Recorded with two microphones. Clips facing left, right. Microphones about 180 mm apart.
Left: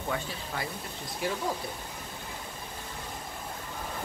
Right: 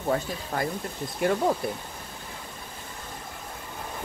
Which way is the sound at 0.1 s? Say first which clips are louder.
Right 7 dB; 45° right (ahead or behind).